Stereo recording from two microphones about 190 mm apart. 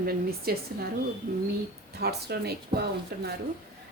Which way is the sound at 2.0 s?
55° right (ahead or behind).